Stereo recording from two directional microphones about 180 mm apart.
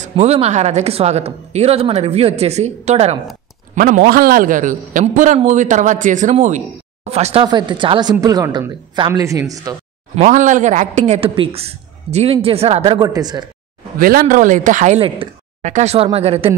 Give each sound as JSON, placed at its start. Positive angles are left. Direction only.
{"t": 0.1, "sound": "speech", "side_deg": -35}
{"t": 3.7, "sound": "a man's voice", "side_deg": -50}
{"t": 7.4, "sound": "a woman's voice", "side_deg": -25}
{"t": 10.1, "sound": "speech", "side_deg": -40}
{"t": 13.9, "sound": "speech", "side_deg": -50}